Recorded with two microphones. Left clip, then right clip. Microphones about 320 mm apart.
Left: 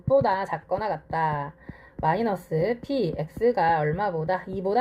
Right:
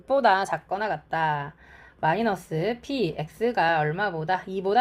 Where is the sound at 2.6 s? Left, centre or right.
Right.